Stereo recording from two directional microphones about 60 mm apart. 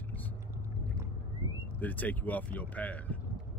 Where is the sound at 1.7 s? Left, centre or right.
Left.